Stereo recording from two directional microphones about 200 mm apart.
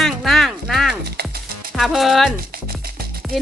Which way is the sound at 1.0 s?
55° right (ahead or behind).